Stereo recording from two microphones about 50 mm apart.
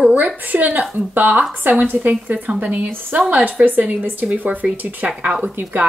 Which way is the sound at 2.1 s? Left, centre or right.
Right.